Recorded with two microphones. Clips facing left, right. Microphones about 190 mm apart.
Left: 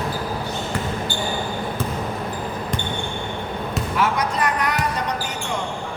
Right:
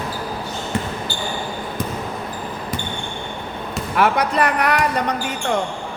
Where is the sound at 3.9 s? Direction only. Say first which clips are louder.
Right 5 dB; 60° right (ahead or behind).